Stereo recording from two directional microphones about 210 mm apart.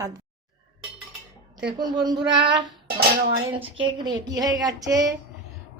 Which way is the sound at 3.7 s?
20° right (ahead or behind).